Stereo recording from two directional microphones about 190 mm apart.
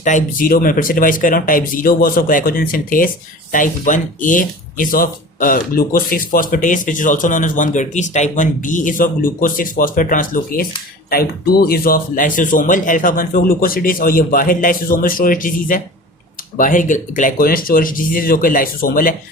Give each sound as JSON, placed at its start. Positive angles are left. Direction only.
{"t": 0.0, "sound": "speech", "side_deg": 40}